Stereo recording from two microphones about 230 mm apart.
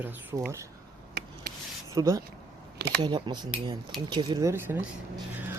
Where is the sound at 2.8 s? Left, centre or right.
Right.